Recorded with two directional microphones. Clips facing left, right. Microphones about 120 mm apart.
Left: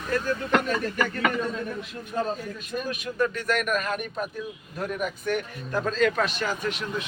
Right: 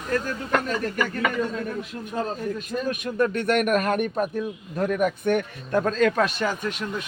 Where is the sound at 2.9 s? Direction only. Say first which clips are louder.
Right 3 dB; 60° right (ahead or behind).